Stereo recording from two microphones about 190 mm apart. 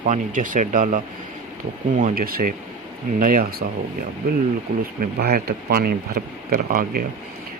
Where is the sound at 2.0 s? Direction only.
45° right (ahead or behind).